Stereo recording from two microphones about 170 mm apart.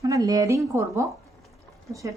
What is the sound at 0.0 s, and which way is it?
Speech, 20° right (ahead or behind).